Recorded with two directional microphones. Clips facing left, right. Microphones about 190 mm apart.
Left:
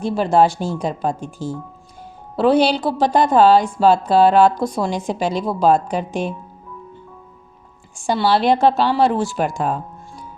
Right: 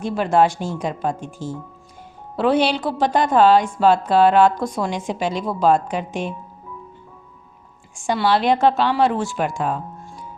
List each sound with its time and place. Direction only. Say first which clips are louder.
0.0 s a woman's voice: left 2 dB; 35° left (ahead or behind)
7.9 s a woman's voice: left 1 dB; 35° left (ahead or behind)